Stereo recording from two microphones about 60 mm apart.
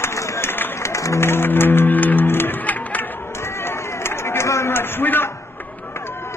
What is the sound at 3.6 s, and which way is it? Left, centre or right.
Run, left.